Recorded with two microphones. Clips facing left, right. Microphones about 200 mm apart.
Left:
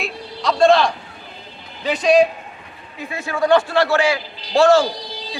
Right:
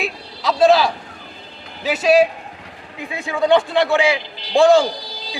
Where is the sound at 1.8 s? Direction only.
5° right (ahead or behind).